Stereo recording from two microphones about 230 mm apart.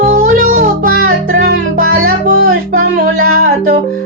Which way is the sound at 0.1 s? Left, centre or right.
Right.